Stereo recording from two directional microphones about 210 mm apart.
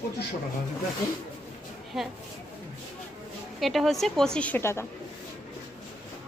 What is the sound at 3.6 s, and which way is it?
A woman's voice, centre (ahead or behind).